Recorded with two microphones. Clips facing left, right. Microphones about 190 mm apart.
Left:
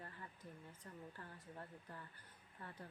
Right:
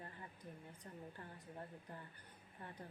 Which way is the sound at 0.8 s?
20° right (ahead or behind).